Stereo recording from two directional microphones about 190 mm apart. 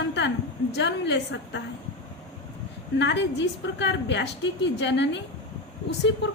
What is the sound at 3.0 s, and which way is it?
A woman's voice, 65° left (ahead or behind).